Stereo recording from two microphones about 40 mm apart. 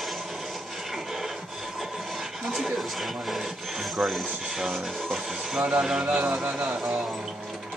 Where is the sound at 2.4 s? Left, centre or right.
Centre.